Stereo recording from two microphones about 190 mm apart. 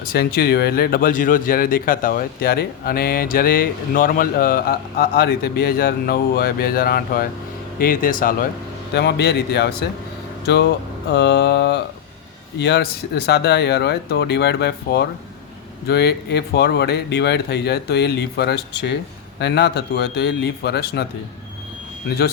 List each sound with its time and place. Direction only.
0.1 s speech: 55° left (ahead or behind)
8.9 s speech: 60° left (ahead or behind)